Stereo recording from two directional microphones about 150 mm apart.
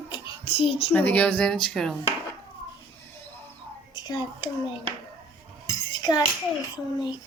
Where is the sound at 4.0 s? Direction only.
30° left (ahead or behind).